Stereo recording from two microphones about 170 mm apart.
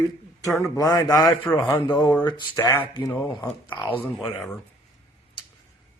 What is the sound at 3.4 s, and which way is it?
Speech, 25° left (ahead or behind).